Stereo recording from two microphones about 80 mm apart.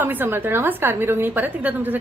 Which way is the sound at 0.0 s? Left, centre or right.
Right.